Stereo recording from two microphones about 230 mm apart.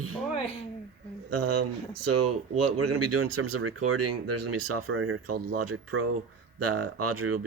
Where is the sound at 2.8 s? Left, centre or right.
Right.